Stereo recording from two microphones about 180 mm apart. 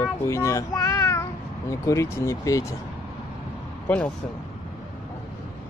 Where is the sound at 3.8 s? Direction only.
10° left (ahead or behind).